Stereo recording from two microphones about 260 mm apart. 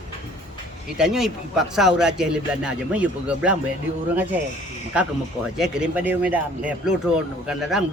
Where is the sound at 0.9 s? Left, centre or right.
Centre.